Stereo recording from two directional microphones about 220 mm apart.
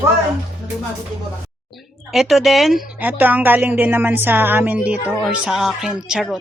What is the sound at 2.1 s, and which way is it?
A woman's voice, centre (ahead or behind).